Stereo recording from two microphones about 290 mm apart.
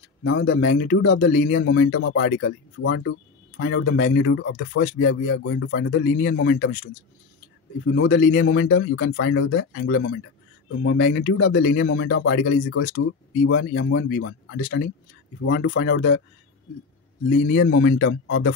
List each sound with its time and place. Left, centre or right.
0.2 s speech: left
7.9 s a man's voice: left
17.5 s speech: left